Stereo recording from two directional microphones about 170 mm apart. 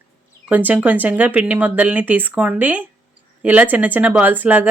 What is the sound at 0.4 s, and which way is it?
Speech, 10° right (ahead or behind).